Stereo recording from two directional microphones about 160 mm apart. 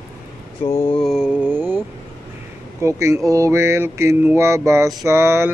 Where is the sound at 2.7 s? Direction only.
20° right (ahead or behind).